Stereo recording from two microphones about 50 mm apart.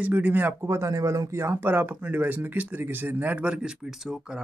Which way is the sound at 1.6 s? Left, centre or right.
Right.